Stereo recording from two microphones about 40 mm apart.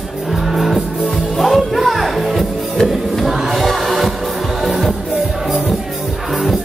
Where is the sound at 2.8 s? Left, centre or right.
Centre.